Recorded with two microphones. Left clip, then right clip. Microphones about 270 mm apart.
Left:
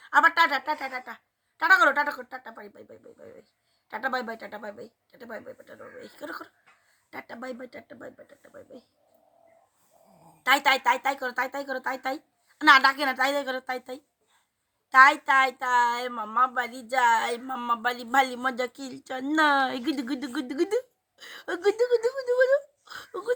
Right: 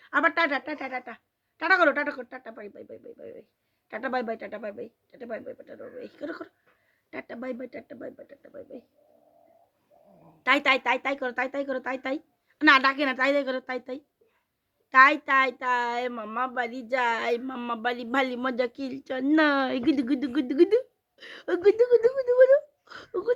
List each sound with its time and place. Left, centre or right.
0.0 s a woman's voice: centre
10.4 s a woman's voice: centre